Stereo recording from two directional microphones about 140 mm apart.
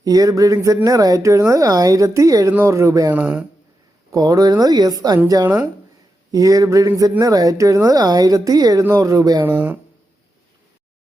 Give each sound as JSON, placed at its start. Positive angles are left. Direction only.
{"t": 0.0, "sound": "speech", "side_deg": -25}
{"t": 3.1, "sound": "speech", "side_deg": -10}
{"t": 4.1, "sound": "speech", "side_deg": -25}
{"t": 6.3, "sound": "speech", "side_deg": -25}
{"t": 9.4, "sound": "speech", "side_deg": -15}